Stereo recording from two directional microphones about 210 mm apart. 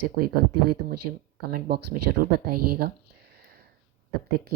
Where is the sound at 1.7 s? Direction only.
45° right (ahead or behind).